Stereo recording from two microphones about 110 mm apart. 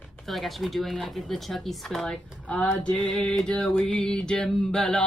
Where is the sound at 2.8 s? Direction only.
10° left (ahead or behind).